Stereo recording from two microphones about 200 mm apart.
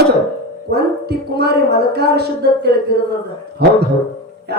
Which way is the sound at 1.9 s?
55° right (ahead or behind).